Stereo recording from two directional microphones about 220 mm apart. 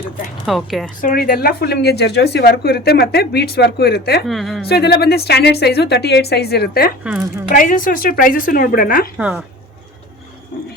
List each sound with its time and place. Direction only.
0.4 s speech: centre (ahead or behind)
1.0 s speech: 40° left (ahead or behind)
4.3 s speech: centre (ahead or behind)
4.6 s speech: 45° left (ahead or behind)
7.0 s speech: 5° right (ahead or behind)
7.5 s a woman's voice: 40° left (ahead or behind)
9.1 s speech: 5° right (ahead or behind)